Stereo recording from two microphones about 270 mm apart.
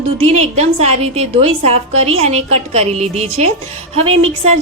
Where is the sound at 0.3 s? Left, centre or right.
Right.